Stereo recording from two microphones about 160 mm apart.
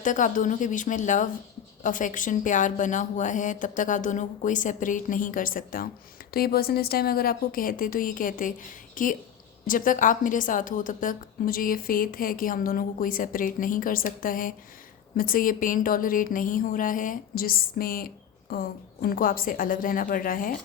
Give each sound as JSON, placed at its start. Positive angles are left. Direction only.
{"t": 0.0, "sound": "speech", "side_deg": 50}
{"t": 6.3, "sound": "a woman's voice", "side_deg": 70}